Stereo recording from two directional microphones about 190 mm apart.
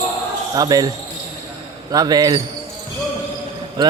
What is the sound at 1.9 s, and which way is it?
Speech, 20° right (ahead or behind).